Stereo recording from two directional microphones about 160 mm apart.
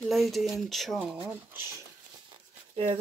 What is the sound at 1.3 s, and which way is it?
Speech, 15° right (ahead or behind).